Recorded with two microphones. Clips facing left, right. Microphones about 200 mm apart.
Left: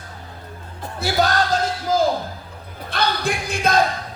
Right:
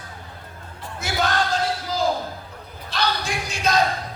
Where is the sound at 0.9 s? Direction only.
35° left (ahead or behind).